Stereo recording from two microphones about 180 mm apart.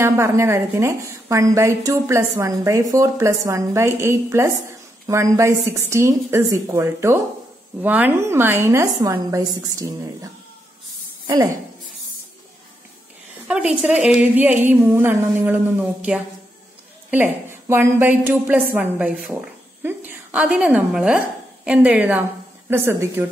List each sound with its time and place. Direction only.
0.0 s a woman's voice: 15° right (ahead or behind)
13.5 s a woman's voice: 5° right (ahead or behind)